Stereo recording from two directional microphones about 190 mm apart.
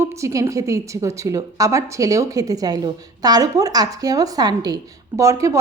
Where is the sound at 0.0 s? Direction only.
15° right (ahead or behind).